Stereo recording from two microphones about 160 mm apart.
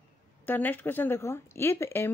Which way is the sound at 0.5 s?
10° left (ahead or behind).